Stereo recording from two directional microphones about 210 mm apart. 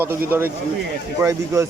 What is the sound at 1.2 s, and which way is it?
Speech, 15° right (ahead or behind).